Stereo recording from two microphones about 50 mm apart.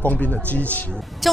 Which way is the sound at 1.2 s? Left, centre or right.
Centre.